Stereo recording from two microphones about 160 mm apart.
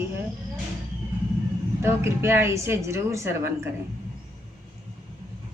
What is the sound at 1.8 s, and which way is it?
A woman's voice, 15° right (ahead or behind).